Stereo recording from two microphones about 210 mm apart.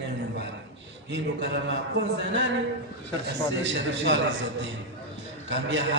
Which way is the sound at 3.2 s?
55° right (ahead or behind).